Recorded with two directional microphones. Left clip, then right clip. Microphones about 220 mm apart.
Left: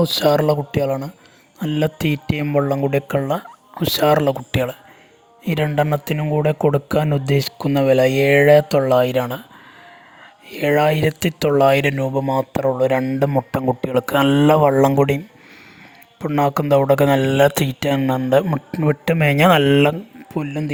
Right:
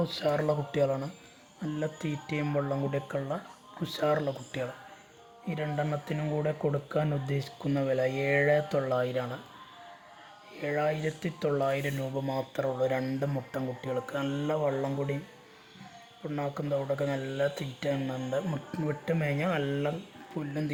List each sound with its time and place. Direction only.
0.0 s speech: 45° left (ahead or behind)
10.5 s speech: 50° left (ahead or behind)
16.2 s speech: 50° left (ahead or behind)
20.4 s speech: 40° left (ahead or behind)